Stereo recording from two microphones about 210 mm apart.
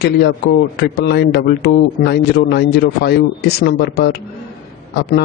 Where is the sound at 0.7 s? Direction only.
50° left (ahead or behind).